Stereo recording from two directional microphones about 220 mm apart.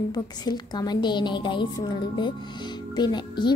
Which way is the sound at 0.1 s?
20° left (ahead or behind).